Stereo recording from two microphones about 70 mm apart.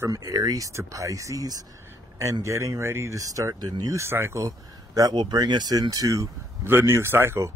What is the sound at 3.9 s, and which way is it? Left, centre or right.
Speech, right.